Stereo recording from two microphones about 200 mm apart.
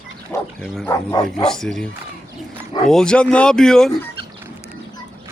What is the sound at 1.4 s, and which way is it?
Speech, centre (ahead or behind).